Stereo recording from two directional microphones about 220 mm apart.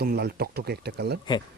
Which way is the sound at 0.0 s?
45° right (ahead or behind).